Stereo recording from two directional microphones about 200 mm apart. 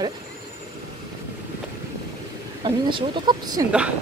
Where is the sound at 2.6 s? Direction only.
25° right (ahead or behind).